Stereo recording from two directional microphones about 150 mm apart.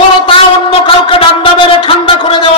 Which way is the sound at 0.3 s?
35° left (ahead or behind).